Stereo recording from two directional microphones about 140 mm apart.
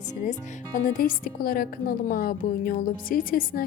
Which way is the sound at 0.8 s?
85° left.